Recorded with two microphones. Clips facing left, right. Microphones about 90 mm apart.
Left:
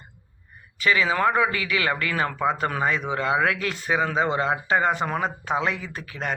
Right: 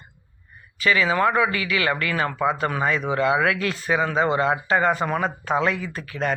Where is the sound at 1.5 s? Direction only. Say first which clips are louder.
Right 2 dB; 30° left (ahead or behind).